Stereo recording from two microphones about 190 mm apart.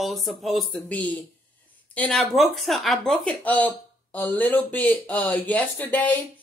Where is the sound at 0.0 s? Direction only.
Centre (ahead or behind).